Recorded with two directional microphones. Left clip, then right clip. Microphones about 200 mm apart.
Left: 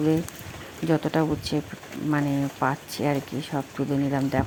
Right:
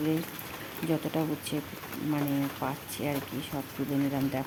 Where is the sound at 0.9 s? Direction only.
15° left (ahead or behind).